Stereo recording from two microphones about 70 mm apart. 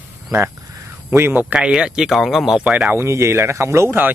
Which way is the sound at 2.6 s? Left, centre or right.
Centre.